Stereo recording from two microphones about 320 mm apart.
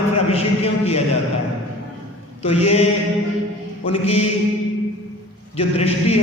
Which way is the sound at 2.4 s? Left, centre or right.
Centre.